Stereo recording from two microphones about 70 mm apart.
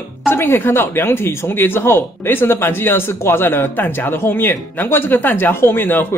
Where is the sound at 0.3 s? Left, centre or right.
Left.